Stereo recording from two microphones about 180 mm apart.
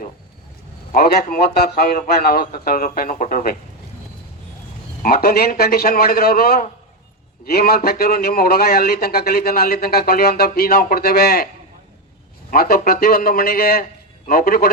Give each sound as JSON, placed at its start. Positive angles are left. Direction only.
{"t": 0.9, "sound": "a man's voice", "side_deg": 55}
{"t": 5.0, "sound": "a man's voice", "side_deg": 55}
{"t": 12.5, "sound": "a man's voice", "side_deg": 55}